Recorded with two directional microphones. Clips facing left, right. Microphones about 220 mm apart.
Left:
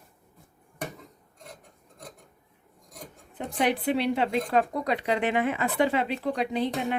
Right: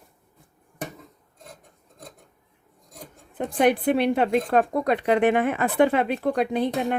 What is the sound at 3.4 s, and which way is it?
A woman's voice, 50° right (ahead or behind).